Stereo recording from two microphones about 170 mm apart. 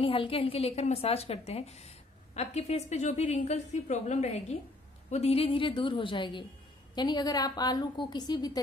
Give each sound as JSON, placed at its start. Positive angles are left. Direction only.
{"t": 0.0, "sound": "a woman's voice", "side_deg": 30}